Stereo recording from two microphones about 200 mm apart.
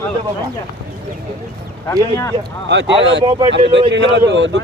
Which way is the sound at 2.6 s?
60° right (ahead or behind).